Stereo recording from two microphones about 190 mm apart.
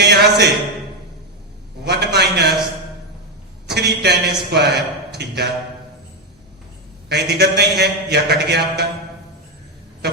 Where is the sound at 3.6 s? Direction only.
60° right (ahead or behind).